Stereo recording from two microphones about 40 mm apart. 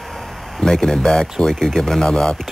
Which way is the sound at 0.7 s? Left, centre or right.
Centre.